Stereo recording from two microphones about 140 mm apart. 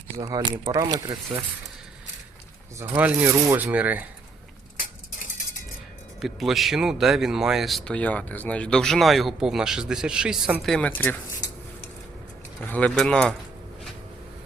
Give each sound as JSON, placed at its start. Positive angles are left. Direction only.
{"t": 0.2, "sound": "speech", "side_deg": -25}
{"t": 2.7, "sound": "speech", "side_deg": -10}
{"t": 6.1, "sound": "speech", "side_deg": 0}
{"t": 12.6, "sound": "speech", "side_deg": 10}